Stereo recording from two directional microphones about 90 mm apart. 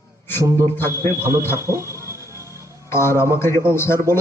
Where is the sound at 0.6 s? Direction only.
25° left (ahead or behind).